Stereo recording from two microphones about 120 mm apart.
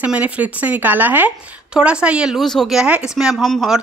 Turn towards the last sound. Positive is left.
turn(degrees=0)  # may be behind; listen again after turning